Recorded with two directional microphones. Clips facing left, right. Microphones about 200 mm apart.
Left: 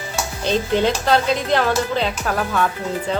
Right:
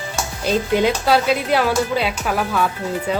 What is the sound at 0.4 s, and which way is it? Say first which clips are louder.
Speech: right 1 dB; 10° right (ahead or behind).